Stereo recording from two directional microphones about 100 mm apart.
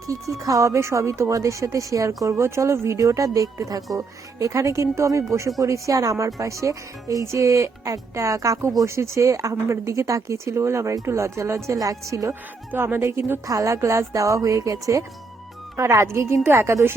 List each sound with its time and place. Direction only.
0.1 s speech: 35° right (ahead or behind)
12.3 s speech: 20° right (ahead or behind)